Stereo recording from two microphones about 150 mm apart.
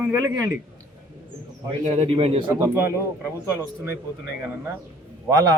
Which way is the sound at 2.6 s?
20° right (ahead or behind).